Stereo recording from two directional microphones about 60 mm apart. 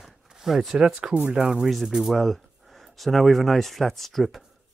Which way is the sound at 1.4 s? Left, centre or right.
Centre.